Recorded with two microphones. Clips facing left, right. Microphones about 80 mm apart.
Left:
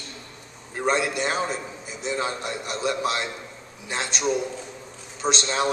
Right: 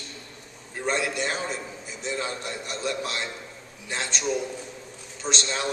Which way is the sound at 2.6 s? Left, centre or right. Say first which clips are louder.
Left 5 dB; centre.